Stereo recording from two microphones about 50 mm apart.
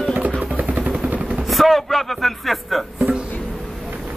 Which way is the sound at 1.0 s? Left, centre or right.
Right.